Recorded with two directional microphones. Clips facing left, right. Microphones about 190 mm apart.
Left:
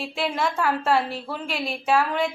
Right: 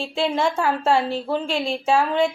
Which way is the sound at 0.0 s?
25° right (ahead or behind).